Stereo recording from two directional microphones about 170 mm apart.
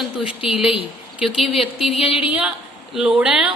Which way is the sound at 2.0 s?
35° left (ahead or behind).